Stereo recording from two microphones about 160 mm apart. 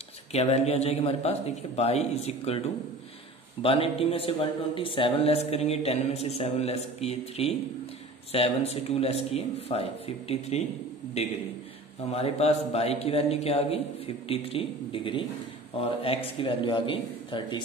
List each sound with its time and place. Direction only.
0.3 s speech: 40° left (ahead or behind)
3.6 s speech: 35° left (ahead or behind)
12.1 s speech: 40° left (ahead or behind)